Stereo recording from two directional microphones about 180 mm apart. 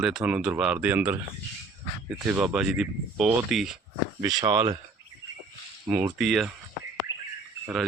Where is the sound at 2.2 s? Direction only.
10° right (ahead or behind).